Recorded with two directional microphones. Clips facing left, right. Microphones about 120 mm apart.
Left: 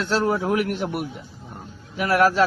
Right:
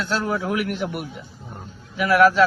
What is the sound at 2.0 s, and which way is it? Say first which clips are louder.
Speech: right 3 dB; 40° left (ahead or behind).